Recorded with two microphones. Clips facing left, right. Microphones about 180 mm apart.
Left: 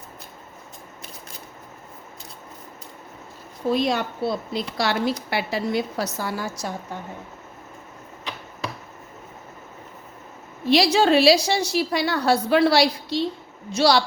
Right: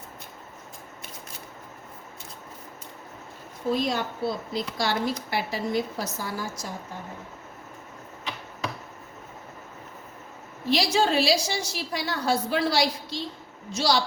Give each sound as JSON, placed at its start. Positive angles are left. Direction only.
{"t": 3.7, "sound": "a woman's voice", "side_deg": 75}
{"t": 10.7, "sound": "a woman's voice", "side_deg": 70}